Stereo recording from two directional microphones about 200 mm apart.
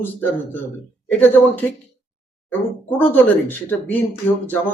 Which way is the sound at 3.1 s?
10° left (ahead or behind).